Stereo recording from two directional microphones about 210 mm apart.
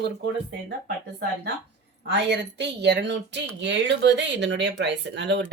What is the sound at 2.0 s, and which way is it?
Speech, 55° right (ahead or behind).